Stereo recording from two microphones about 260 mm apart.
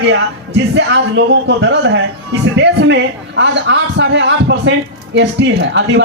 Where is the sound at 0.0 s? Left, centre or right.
Right.